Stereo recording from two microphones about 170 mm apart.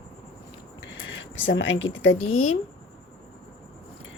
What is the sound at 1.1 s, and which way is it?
Speech, 90° left.